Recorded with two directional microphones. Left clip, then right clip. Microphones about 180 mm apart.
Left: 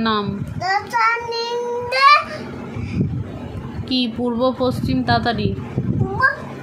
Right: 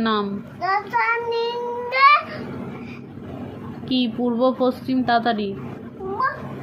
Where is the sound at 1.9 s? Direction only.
15° left (ahead or behind).